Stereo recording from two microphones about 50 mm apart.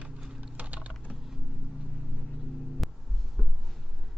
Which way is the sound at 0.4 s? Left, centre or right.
Right.